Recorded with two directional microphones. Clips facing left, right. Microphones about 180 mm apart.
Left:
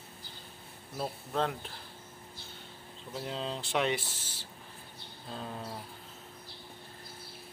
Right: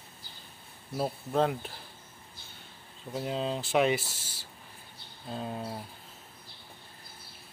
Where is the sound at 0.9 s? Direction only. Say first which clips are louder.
Right 5 dB; 10° right (ahead or behind).